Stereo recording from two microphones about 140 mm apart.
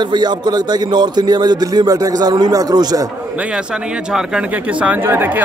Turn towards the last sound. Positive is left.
turn(degrees=-15)  # may be behind; listen again after turning